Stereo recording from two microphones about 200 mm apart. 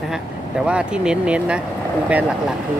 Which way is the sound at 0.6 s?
5° right (ahead or behind).